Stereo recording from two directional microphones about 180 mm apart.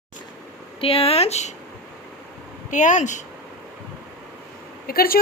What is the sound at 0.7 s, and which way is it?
Speech, 30° left (ahead or behind).